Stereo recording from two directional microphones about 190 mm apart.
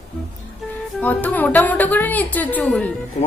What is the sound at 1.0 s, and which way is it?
A woman's voice, 10° left (ahead or behind).